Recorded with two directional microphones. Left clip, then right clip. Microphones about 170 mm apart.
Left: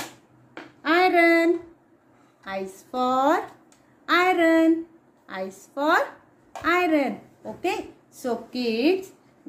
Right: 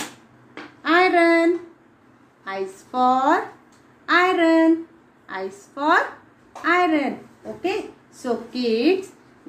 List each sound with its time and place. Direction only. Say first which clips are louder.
0.8 s child singing: right 2 dB; 25° left (ahead or behind)
2.9 s speech: right 4 dB; 35° left (ahead or behind)
4.0 s a sound: right 2 dB; 35° left (ahead or behind)
5.2 s a woman's voice: right 3 dB; 30° left (ahead or behind)
8.2 s speech: right 3 dB; 30° left (ahead or behind)